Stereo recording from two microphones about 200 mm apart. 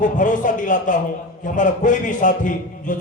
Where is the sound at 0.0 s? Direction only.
40° left (ahead or behind).